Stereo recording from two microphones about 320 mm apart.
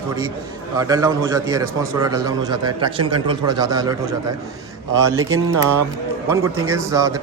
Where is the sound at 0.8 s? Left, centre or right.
Centre.